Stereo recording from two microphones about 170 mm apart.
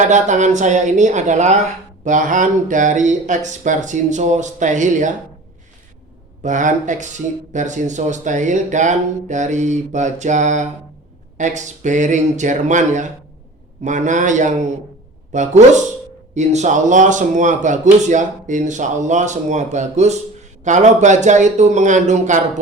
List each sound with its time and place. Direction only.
0.0 s speech: 45° right (ahead or behind)
6.4 s speech: 45° right (ahead or behind)